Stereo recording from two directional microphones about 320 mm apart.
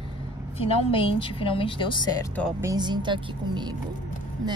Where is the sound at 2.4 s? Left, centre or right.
Centre.